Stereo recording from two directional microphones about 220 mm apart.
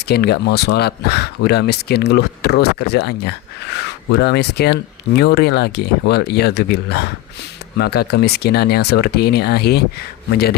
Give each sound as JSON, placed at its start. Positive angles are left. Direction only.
{"t": 0.1, "sound": "speech", "side_deg": 45}